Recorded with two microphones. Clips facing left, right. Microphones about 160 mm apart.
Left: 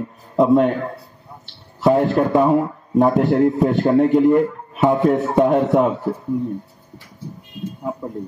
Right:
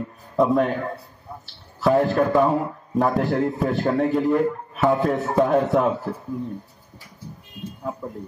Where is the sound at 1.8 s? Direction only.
20° left (ahead or behind).